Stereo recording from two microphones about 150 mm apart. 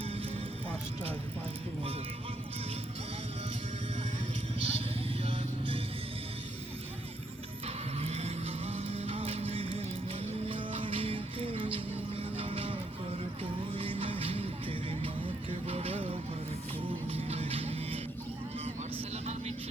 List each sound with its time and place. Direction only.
4.6 s music: 40° right (ahead or behind)
7.9 s music: 45° right (ahead or behind)
19.1 s vehicle: 45° right (ahead or behind)